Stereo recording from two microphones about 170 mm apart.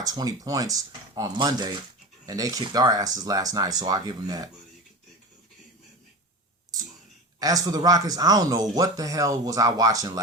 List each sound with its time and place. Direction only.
0.0 s speech: 20° right (ahead or behind)
7.3 s speech: 20° right (ahead or behind)